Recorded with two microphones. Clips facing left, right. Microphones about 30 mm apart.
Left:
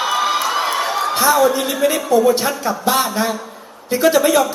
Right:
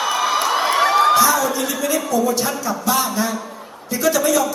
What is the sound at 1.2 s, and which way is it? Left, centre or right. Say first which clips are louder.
Speech: left 2 dB; left.